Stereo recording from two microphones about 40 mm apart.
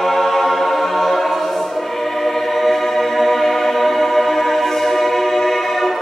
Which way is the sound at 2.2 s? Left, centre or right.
Centre.